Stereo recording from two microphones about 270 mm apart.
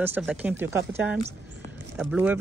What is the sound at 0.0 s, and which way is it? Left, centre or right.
Speech, centre.